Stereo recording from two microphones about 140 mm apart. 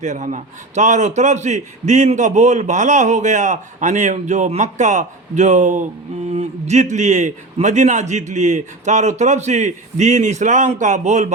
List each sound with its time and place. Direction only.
0.0 s a man's voice: 60° right (ahead or behind)